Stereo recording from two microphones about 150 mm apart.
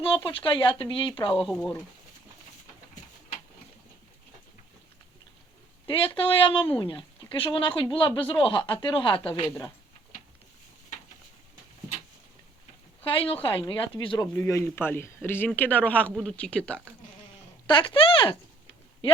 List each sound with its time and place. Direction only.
0.0 s speech: 35° left (ahead or behind)
1.4 s speech: centre (ahead or behind)
6.1 s speech: 35° left (ahead or behind)
13.1 s speech: 40° left (ahead or behind)
14.3 s speech: 20° left (ahead or behind)
17.7 s speech: 35° left (ahead or behind)